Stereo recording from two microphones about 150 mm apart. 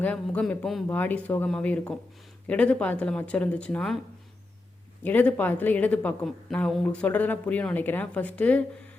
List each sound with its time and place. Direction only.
0.0 s speech: 10° left (ahead or behind)
5.0 s speech: 10° left (ahead or behind)